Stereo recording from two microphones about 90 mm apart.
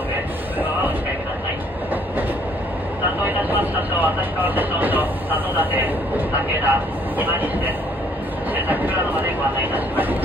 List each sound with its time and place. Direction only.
3.3 s vehicle: 20° right (ahead or behind)
7.2 s speech: 20° right (ahead or behind)